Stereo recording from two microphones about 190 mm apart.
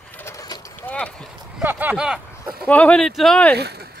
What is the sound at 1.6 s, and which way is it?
Speech, 10° right (ahead or behind).